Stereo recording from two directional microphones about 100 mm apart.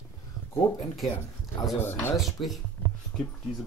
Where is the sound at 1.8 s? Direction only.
20° left (ahead or behind).